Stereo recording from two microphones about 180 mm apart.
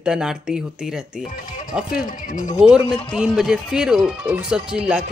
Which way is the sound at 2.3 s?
45° left (ahead or behind).